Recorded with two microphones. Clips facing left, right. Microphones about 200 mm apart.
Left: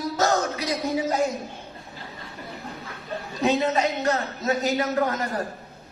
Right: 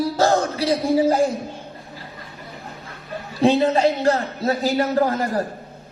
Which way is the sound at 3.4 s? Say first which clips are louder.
Right 6 dB; 30° right (ahead or behind).